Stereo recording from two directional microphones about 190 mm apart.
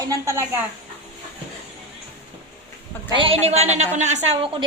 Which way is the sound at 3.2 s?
30° right (ahead or behind).